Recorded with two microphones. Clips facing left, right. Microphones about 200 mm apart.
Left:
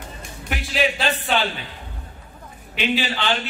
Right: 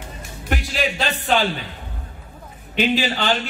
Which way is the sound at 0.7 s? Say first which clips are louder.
Left 5 dB; centre (ahead or behind).